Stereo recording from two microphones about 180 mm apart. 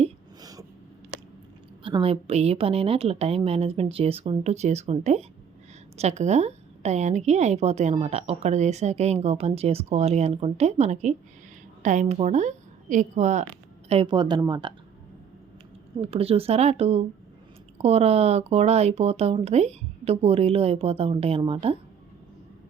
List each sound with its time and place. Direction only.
1.8 s a woman's voice: 30° right (ahead or behind)
16.0 s a woman's voice: 30° right (ahead or behind)